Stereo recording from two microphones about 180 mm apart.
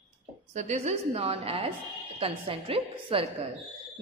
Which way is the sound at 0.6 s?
40° right (ahead or behind).